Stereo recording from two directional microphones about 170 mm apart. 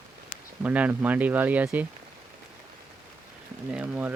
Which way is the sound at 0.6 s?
10° right (ahead or behind).